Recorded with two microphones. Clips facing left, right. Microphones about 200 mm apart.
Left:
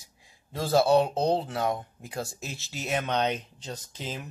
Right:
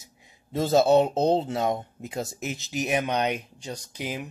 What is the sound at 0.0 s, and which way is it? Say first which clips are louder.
Speech: right 5 dB; 20° right (ahead or behind).